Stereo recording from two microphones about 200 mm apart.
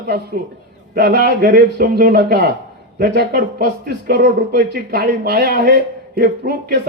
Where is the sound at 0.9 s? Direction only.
50° right (ahead or behind).